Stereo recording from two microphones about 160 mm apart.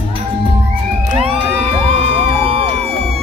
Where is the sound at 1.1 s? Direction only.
40° right (ahead or behind).